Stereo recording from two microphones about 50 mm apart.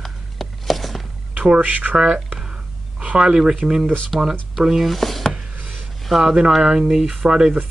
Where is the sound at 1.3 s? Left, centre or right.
Right.